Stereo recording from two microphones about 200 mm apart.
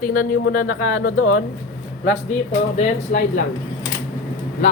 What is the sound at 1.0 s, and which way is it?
Speech, 90° left.